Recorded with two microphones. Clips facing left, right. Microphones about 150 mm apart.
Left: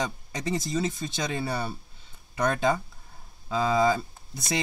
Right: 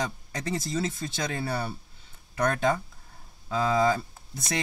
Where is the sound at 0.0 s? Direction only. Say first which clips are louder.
Left 1 dB; 20° left (ahead or behind).